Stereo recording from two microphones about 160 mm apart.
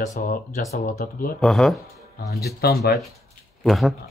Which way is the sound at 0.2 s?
60° left (ahead or behind).